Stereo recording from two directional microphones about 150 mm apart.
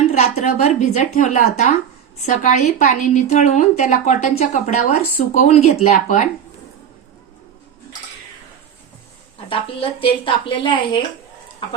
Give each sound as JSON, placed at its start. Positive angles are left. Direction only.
{"t": 0.1, "sound": "a sound", "side_deg": 45}
{"t": 0.4, "sound": "a woman's voice", "side_deg": 60}
{"t": 10.0, "sound": "a woman's voice", "side_deg": 35}